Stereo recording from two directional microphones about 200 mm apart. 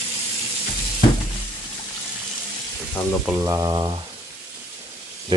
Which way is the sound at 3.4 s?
20° right (ahead or behind).